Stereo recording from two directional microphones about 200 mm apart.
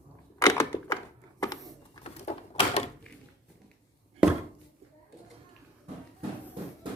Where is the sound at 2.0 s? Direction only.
30° left (ahead or behind).